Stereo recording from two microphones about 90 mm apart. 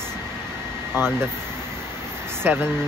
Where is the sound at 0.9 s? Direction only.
25° right (ahead or behind).